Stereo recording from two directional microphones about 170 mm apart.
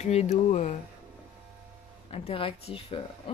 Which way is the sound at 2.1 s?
35° left (ahead or behind).